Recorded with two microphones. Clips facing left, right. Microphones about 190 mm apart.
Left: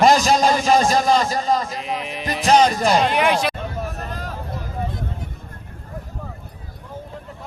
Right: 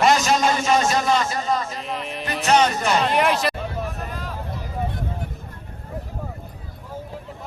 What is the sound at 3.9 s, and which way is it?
Vehicle, 45° left (ahead or behind).